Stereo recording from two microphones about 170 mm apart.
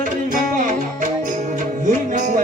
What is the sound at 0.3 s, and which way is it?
Music, 50° right (ahead or behind).